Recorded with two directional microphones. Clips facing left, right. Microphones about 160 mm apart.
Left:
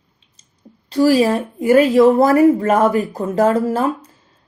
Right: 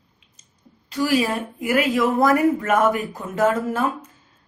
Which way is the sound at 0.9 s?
35° left (ahead or behind).